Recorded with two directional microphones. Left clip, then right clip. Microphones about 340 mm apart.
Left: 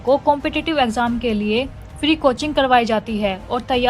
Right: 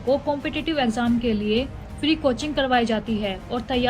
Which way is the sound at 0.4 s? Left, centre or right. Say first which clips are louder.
Left 5 dB; centre.